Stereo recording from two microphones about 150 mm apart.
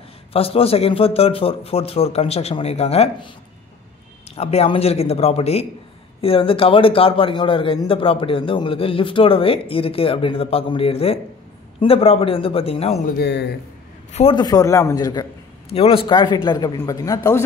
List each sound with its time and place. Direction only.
0.3 s a man's voice: 40° left (ahead or behind)
4.4 s a man's voice: 45° left (ahead or behind)
13.0 s speech: 90° left
14.3 s a man's voice: 25° left (ahead or behind)
15.7 s a man's voice: 40° left (ahead or behind); by 17.4 s 20° left (ahead or behind)